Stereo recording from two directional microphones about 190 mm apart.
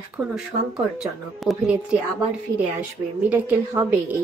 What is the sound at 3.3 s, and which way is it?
Speech, 10° right (ahead or behind).